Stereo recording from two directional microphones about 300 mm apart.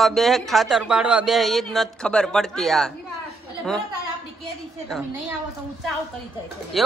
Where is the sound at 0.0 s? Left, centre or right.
Centre.